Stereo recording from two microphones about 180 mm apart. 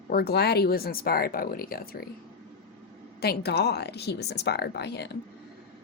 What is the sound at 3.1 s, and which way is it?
Speech, 65° left (ahead or behind).